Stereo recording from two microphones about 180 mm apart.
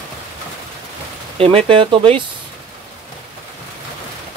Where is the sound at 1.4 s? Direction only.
30° right (ahead or behind).